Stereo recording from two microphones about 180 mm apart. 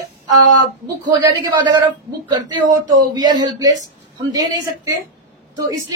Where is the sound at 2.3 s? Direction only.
25° right (ahead or behind).